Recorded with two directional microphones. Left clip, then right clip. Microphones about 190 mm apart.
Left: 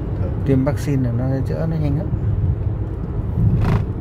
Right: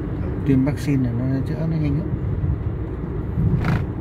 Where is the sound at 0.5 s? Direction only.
15° left (ahead or behind).